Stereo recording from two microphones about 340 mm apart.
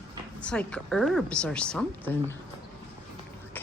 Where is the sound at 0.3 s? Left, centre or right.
Centre.